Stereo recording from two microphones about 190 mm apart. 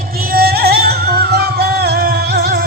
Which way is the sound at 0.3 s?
55° right (ahead or behind).